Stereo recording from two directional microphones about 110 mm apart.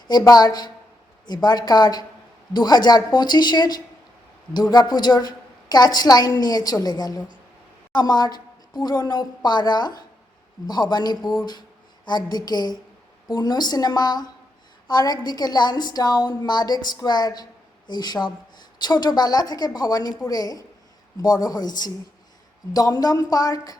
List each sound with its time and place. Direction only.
0.1 s a woman's voice: 35° left (ahead or behind)